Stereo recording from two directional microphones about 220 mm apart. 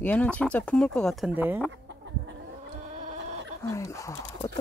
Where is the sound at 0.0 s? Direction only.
5° left (ahead or behind).